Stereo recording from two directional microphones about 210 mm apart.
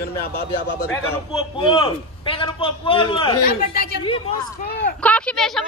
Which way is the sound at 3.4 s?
45° left (ahead or behind).